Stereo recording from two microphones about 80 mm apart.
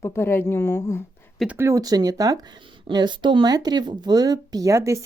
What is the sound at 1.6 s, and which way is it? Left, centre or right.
Speech, right.